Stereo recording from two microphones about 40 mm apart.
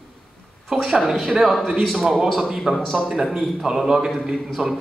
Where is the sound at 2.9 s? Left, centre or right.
Centre.